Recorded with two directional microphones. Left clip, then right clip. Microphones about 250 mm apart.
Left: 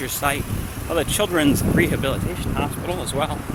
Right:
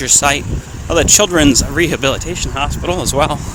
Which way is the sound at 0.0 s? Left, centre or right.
Right.